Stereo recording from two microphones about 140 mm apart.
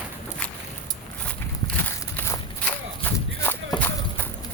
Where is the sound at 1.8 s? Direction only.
15° left (ahead or behind).